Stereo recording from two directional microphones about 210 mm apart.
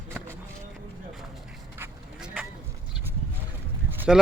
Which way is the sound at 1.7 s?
10° right (ahead or behind).